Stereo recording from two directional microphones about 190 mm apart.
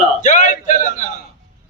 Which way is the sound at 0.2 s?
40° left (ahead or behind).